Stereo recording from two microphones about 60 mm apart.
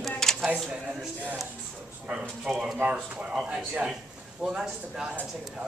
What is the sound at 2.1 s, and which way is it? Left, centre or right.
Speech, centre.